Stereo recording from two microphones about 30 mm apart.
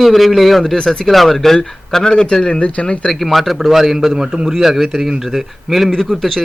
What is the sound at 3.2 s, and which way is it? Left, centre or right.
Speech, centre.